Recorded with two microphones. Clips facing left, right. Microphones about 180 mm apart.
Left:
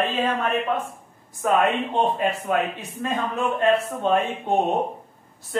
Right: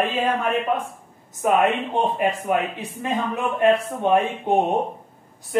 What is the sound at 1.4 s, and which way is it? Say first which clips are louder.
Speech: right 1 dB; 15° right (ahead or behind).